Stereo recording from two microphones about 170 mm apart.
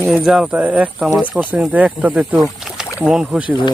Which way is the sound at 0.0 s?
Centre (ahead or behind).